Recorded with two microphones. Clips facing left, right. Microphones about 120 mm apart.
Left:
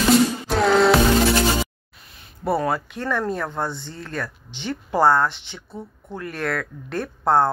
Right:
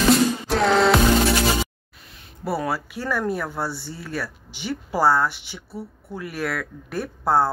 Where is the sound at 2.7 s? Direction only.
5° right (ahead or behind).